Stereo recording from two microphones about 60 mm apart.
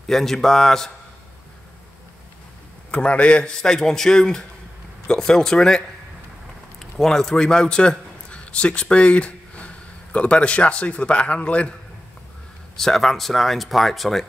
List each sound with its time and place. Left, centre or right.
0.1 s speech: centre
2.9 s a man's voice: centre
12.7 s speech: centre